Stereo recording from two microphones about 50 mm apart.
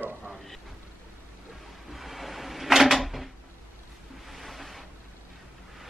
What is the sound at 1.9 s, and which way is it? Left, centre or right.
Cupboard open or close, centre.